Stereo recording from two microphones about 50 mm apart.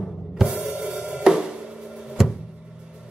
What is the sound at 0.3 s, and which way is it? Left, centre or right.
Drum kit, centre.